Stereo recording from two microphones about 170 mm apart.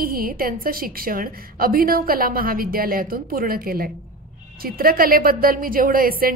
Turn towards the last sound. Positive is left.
turn(degrees=-60)  # may be behind; listen again after turning